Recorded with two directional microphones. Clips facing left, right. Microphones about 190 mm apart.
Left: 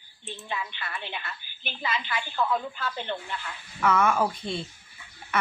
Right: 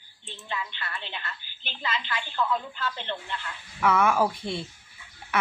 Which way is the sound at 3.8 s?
10° right (ahead or behind).